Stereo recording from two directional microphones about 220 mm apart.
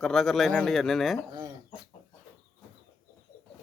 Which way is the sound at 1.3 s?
15° right (ahead or behind).